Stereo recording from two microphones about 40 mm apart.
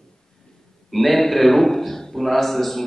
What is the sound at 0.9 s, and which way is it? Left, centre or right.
A man's voice, centre.